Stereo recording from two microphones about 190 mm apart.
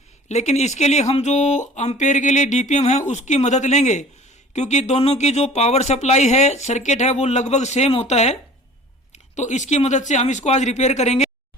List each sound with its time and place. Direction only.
0.3 s speech: 35° left (ahead or behind)